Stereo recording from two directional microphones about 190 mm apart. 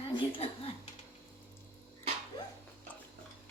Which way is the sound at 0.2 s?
30° left (ahead or behind).